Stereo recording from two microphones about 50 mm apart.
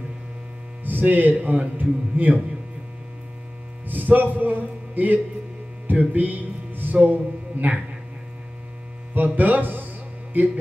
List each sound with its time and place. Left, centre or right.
0.8 s speech: right
3.8 s a man's voice: right
5.9 s music: right
7.1 s speech: right
9.1 s speech: right